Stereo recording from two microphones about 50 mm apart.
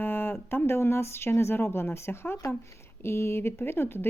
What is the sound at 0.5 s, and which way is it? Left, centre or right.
Speech, left.